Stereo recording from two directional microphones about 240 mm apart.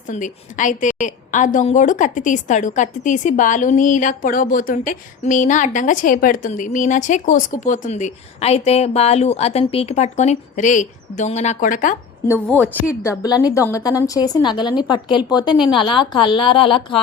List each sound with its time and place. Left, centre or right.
0.1 s a woman's voice: left
12.6 s a woman's voice: centre